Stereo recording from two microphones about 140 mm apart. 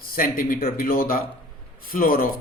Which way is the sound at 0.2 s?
85° left.